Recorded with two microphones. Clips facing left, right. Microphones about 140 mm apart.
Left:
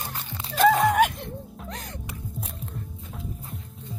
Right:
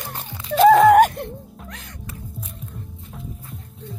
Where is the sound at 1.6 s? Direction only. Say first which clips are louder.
Left 2 dB; 35° left (ahead or behind).